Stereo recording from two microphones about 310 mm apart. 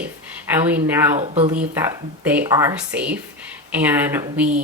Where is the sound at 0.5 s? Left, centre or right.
Centre.